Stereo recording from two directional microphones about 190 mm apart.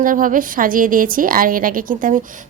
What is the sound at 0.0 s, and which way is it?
A woman's voice, 45° right (ahead or behind).